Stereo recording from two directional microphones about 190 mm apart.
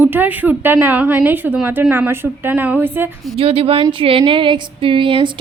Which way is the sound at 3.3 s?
30° right (ahead or behind).